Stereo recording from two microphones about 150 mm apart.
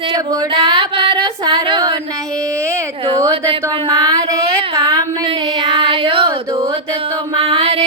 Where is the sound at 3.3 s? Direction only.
35° right (ahead or behind).